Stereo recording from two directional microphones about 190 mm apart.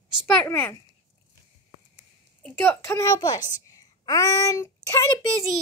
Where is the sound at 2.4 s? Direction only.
10° left (ahead or behind).